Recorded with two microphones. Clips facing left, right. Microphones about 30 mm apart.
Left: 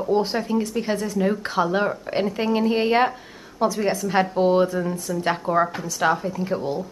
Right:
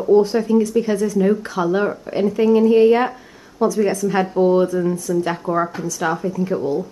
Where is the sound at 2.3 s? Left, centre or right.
Left.